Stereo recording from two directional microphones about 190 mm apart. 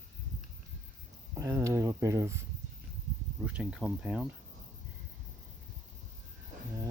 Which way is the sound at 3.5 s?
5° right (ahead or behind).